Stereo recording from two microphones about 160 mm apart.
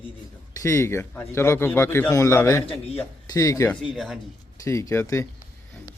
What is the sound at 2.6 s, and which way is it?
Speech, 35° left (ahead or behind).